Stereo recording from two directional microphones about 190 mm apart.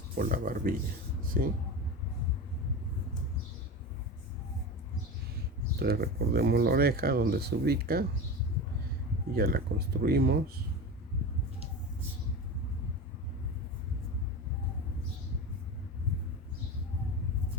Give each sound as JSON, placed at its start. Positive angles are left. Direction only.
{"t": 0.2, "sound": "speech", "side_deg": -50}
{"t": 5.8, "sound": "speech", "side_deg": -55}
{"t": 9.3, "sound": "speech", "side_deg": -55}